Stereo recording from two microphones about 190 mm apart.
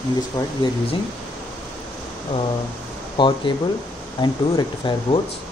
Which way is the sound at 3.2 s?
25° left (ahead or behind).